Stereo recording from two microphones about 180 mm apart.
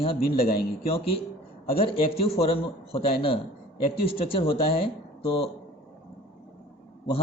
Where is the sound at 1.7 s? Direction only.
35° left (ahead or behind).